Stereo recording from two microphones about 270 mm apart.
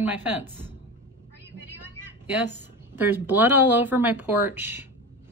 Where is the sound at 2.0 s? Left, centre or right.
Centre.